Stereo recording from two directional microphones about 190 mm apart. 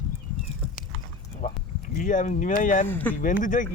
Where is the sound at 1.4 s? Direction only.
40° left (ahead or behind).